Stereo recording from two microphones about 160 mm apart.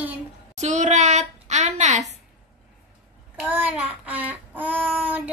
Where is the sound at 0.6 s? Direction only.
45° right (ahead or behind).